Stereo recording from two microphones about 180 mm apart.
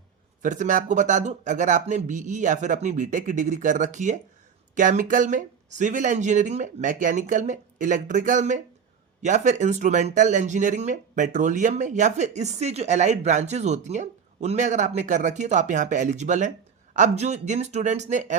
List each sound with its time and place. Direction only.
0.4 s speech: 45° right (ahead or behind)